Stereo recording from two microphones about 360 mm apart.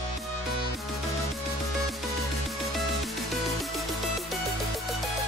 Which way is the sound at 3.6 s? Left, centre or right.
Centre.